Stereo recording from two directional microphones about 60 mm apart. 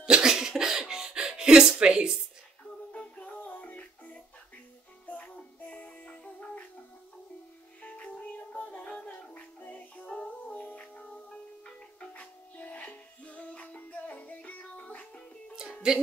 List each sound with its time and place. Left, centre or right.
0.0 s music: centre
2.9 s music: centre
7.8 s music: left
8.8 s gargling: centre
9.3 s music: left
11.1 s music: centre
12.1 s music: left
15.5 s music: centre